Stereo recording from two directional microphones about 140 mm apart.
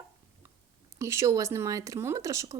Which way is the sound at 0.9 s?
20° right (ahead or behind).